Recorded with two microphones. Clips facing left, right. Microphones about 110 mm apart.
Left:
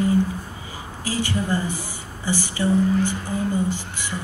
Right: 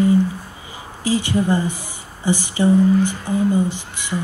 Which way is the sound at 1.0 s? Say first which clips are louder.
Right 6 dB; 20° right (ahead or behind).